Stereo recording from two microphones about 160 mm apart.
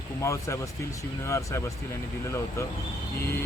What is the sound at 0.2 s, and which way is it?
Speech, 20° left (ahead or behind).